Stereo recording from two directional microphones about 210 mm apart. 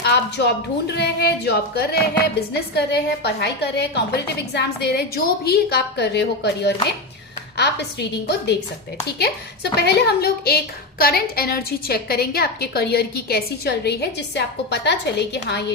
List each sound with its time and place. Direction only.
0.0 s a woman's voice: 55° left (ahead or behind)
9.8 s a woman's voice: 50° left (ahead or behind)